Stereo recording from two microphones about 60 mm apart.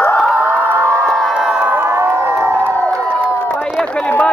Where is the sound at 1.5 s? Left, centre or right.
Right.